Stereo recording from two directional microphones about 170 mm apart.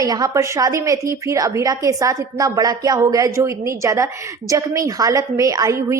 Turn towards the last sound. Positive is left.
turn(degrees=-20)  # may be behind; listen again after turning